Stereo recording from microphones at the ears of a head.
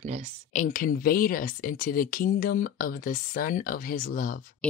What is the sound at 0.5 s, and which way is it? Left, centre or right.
Speech, left.